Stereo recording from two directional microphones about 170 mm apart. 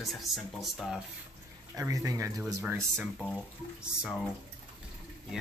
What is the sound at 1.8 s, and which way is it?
Speech, 20° right (ahead or behind).